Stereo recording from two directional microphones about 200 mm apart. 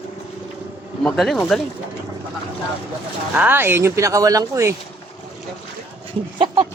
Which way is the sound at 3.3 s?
10° right (ahead or behind).